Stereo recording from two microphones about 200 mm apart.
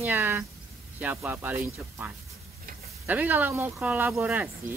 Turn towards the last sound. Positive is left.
turn(degrees=-10)  # may be behind; listen again after turning